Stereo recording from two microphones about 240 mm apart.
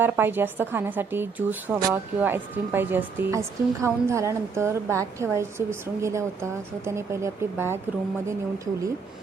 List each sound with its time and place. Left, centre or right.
0.0 s a woman's voice: centre